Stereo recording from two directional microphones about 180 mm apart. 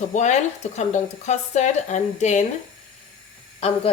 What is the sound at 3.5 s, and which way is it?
Speech, 30° left (ahead or behind).